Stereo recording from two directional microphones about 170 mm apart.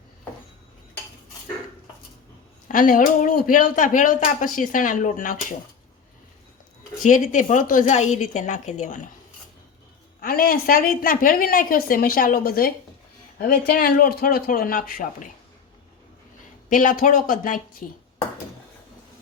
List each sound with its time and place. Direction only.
2.6 s speech: 50° left (ahead or behind)
7.0 s speech: 45° left (ahead or behind)
10.2 s a woman's voice: 60° left (ahead or behind)
16.6 s speech: 50° left (ahead or behind)